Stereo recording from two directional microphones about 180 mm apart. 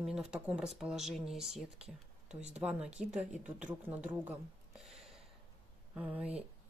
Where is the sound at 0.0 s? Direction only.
5° right (ahead or behind).